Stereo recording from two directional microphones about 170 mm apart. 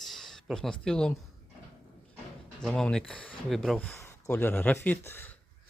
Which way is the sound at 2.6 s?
5° left (ahead or behind).